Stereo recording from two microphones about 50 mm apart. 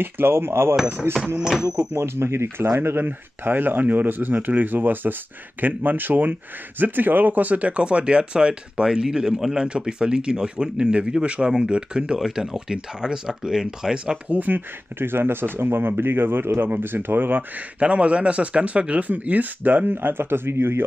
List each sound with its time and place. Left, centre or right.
0.0 s speech: right; by 14.1 s centre
14.3 s speech: right
15.0 s speech: right
17.7 s speech: right